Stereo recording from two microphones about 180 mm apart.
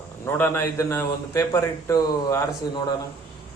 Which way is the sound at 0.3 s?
10° left (ahead or behind).